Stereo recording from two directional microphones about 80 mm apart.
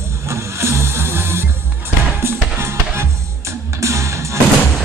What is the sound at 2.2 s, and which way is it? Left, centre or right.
Music, right.